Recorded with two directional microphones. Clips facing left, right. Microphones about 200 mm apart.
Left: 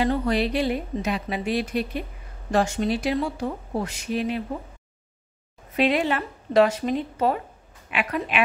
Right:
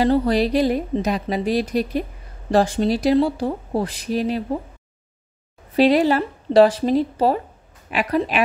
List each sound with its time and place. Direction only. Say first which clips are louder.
0.0 s a woman's voice: right 5 dB; 35° right (ahead or behind)
5.8 s a woman's voice: right 6 dB; 35° right (ahead or behind)